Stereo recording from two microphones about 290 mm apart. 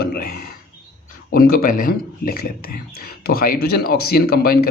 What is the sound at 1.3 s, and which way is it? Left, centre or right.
Speech, left.